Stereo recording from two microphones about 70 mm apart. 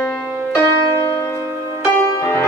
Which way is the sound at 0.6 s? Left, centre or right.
Left.